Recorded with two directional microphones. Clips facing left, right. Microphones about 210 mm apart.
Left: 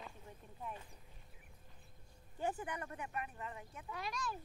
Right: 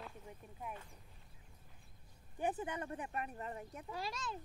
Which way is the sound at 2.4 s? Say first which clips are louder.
Right 2 dB; 20° right (ahead or behind).